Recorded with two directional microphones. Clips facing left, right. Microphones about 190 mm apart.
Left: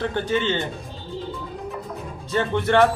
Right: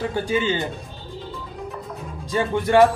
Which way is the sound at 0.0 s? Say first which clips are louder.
Even; 10° right (ahead or behind).